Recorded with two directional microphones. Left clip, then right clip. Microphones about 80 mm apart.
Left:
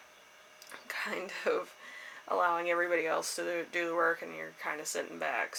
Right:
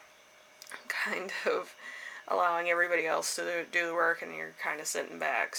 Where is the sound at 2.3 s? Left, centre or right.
Right.